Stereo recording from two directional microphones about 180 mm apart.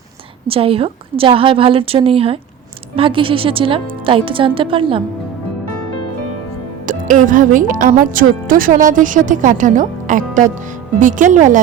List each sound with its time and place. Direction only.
0.4 s a woman's voice: 30° right (ahead or behind)
6.8 s speech: 45° right (ahead or behind)